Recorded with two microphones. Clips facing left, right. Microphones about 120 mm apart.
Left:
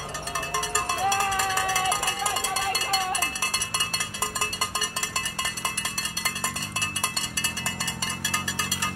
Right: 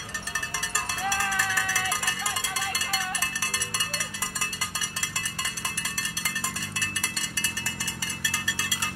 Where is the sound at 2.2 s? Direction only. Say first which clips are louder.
Left 5 dB; 20° left (ahead or behind).